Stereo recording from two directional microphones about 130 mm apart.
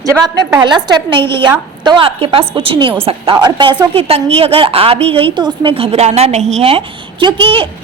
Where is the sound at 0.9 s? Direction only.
35° right (ahead or behind).